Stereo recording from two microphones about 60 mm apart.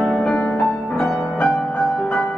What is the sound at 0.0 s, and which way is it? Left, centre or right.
Music, centre.